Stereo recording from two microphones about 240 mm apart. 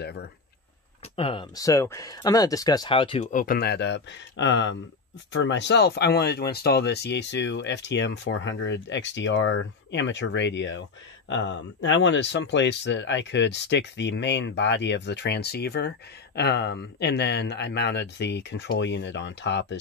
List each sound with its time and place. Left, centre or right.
0.0 s speech: left
1.1 s speech: left